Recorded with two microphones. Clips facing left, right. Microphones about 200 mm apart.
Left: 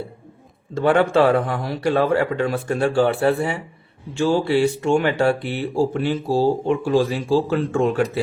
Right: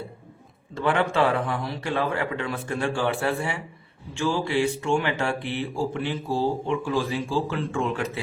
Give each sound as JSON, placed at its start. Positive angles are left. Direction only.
{"t": 0.7, "sound": "speech", "side_deg": 45}